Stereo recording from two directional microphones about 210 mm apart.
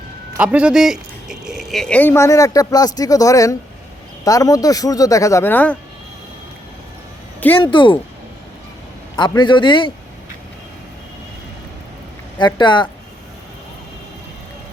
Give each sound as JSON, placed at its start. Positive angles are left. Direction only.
{"t": 0.3, "sound": "speech", "side_deg": -5}
{"t": 7.6, "sound": "a man's voice", "side_deg": 25}
{"t": 9.1, "sound": "a man's voice", "side_deg": 20}
{"t": 12.4, "sound": "a man's voice", "side_deg": 20}